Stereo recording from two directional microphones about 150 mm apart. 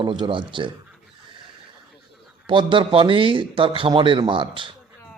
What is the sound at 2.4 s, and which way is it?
Speech, 35° right (ahead or behind).